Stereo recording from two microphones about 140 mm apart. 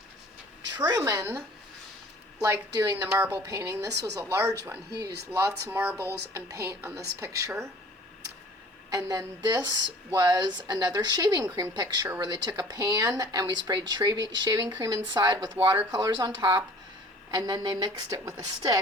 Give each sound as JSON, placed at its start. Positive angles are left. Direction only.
{"t": 0.8, "sound": "a woman's voice", "side_deg": -25}
{"t": 8.9, "sound": "a woman's voice", "side_deg": -25}